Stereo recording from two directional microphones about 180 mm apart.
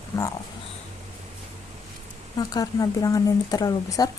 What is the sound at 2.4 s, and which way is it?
Speech, 20° left (ahead or behind).